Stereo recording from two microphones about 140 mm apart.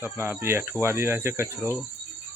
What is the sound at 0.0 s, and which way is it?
Speech, 15° right (ahead or behind).